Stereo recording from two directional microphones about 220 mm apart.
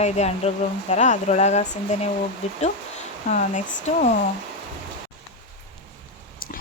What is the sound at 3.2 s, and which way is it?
Speech, 30° left (ahead or behind).